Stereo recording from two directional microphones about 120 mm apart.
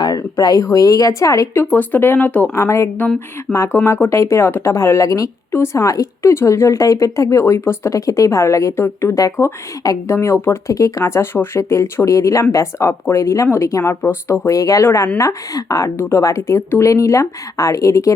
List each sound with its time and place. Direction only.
0.0 s a woman's voice: 30° left (ahead or behind)